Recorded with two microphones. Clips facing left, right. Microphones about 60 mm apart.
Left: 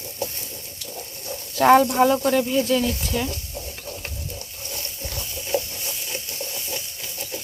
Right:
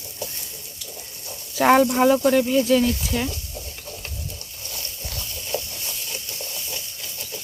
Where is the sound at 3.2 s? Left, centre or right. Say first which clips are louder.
Even; left.